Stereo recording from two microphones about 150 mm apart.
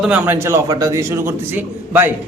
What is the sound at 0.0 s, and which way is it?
Speech, 10° right (ahead or behind).